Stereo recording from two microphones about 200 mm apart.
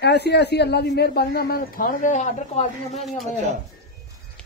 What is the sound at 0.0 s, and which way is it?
A man's voice, 55° left (ahead or behind).